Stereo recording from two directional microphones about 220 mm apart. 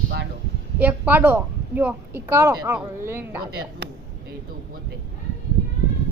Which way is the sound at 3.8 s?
50° right (ahead or behind).